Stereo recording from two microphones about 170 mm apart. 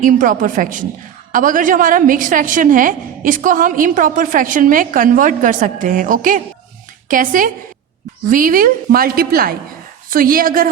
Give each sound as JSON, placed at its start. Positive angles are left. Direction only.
{"t": 0.0, "sound": "a woman's voice", "side_deg": -50}